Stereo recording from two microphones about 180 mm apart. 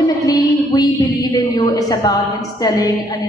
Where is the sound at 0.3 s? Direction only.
20° left (ahead or behind).